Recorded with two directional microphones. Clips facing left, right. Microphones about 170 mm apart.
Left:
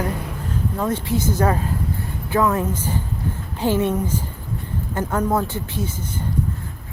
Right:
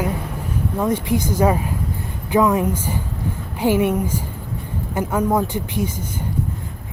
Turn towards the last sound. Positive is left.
turn(degrees=-15)  # may be behind; listen again after turning